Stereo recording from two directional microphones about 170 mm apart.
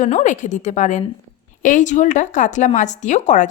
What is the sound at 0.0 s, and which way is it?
A woman's voice, 45° left (ahead or behind).